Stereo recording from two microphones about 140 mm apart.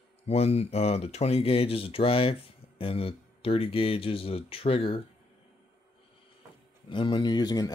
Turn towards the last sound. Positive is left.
turn(degrees=30)  # may be behind; listen again after turning